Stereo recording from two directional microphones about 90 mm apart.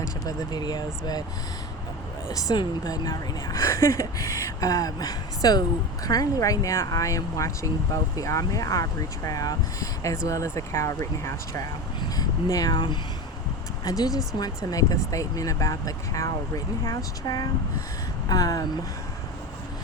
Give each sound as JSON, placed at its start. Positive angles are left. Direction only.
{"t": 0.3, "sound": "speech", "side_deg": 50}
{"t": 2.3, "sound": "speech", "side_deg": 45}
{"t": 3.5, "sound": "speech", "side_deg": 30}
{"t": 11.9, "sound": "speech", "side_deg": 45}
{"t": 12.7, "sound": "speech", "side_deg": 55}
{"t": 13.8, "sound": "speech", "side_deg": 45}